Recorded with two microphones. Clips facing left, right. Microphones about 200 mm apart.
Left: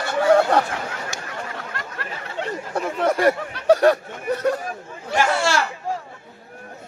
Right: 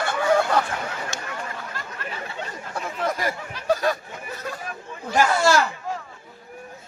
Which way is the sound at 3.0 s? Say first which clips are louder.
Left 8 dB; 70° left (ahead or behind).